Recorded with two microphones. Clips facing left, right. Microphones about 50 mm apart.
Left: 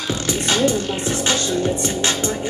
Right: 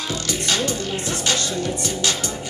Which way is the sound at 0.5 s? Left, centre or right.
Left.